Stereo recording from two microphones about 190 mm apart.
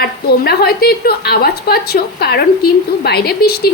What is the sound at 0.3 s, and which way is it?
A woman's voice, 55° left (ahead or behind).